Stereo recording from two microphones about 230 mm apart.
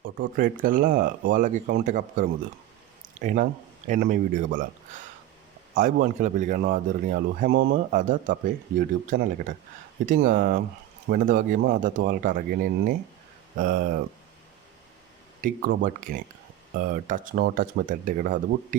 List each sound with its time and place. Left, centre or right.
0.3 s speech: right
5.7 s speech: right
15.4 s speech: right